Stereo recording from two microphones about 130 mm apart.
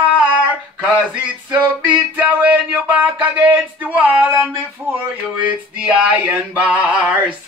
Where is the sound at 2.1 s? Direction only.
10° right (ahead or behind).